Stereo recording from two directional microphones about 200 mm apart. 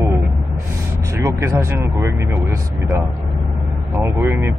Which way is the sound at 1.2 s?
15° right (ahead or behind).